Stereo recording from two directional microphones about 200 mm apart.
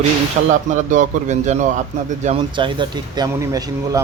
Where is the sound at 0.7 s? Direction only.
40° right (ahead or behind).